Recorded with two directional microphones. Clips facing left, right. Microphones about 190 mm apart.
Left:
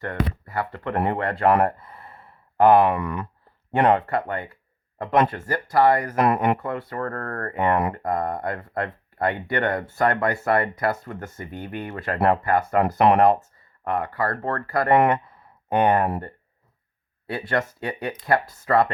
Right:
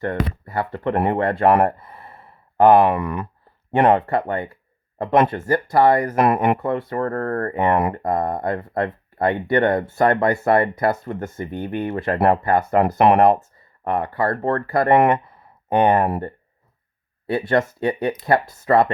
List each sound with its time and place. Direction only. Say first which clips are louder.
0.0 s speech: right 3 dB; 25° right (ahead or behind)